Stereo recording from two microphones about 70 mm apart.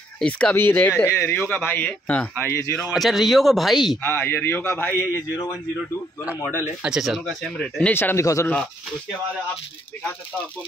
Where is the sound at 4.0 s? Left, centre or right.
Left.